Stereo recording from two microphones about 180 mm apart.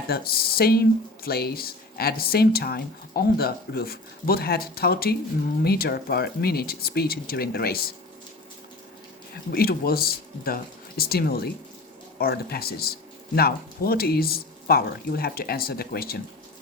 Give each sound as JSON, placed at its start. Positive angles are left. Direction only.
{"t": 0.1, "sound": "speech", "side_deg": 55}
{"t": 9.5, "sound": "speech", "side_deg": 55}